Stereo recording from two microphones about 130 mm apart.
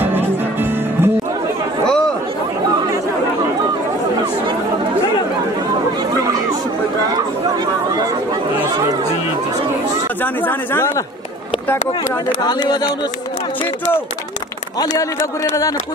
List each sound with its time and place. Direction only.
0.0 s music: 15° right (ahead or behind)
10.2 s speech: 15° left (ahead or behind)
12.4 s speech: 30° left (ahead or behind)
14.8 s a man's voice: 25° left (ahead or behind)